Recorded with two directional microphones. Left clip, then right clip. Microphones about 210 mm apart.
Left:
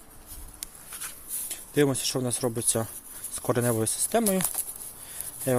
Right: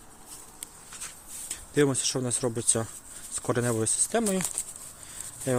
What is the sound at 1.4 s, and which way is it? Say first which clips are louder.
Speech: even; 5° left (ahead or behind).